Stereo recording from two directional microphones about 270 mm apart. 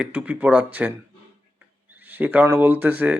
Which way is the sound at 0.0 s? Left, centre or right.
Centre.